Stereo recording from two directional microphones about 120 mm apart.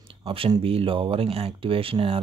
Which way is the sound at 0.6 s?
50° right (ahead or behind).